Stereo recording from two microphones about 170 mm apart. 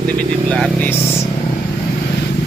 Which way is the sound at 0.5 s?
5° left (ahead or behind).